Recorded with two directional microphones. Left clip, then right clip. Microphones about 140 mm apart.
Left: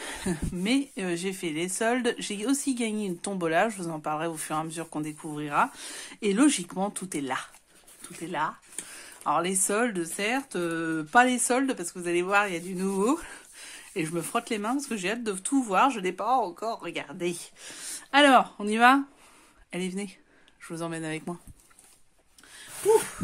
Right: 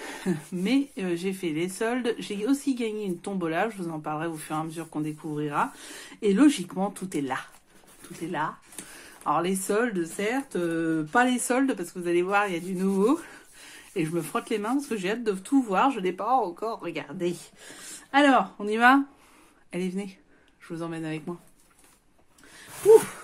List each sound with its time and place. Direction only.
0.0 s speech: 35° left (ahead or behind)
17.8 s speech: 45° left (ahead or behind)
20.6 s speech: 45° left (ahead or behind)